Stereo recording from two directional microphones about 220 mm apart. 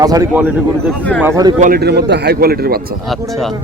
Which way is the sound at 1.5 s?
40° right (ahead or behind).